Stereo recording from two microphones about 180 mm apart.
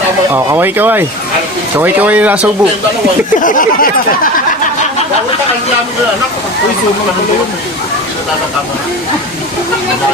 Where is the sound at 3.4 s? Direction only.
50° left (ahead or behind).